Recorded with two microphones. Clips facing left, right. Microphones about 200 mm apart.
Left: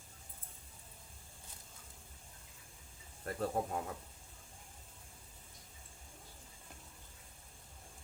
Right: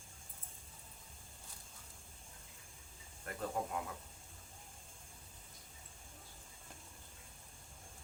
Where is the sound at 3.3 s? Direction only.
35° left (ahead or behind).